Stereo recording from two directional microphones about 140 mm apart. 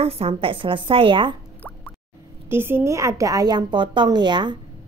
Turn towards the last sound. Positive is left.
turn(degrees=-35)  # may be behind; listen again after turning